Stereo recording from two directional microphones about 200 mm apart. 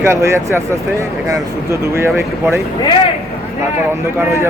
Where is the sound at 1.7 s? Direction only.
10° right (ahead or behind).